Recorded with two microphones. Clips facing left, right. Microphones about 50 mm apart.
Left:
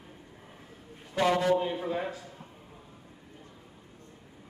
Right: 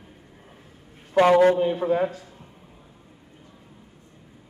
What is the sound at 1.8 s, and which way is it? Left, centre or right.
Speech, right.